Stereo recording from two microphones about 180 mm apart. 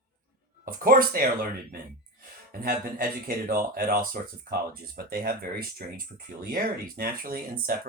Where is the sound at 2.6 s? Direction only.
55° right (ahead or behind).